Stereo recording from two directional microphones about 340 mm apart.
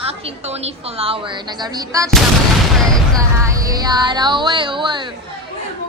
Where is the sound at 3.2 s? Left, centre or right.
Centre.